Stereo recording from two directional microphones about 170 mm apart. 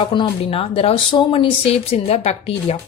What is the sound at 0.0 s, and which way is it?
A woman's voice, 30° left (ahead or behind).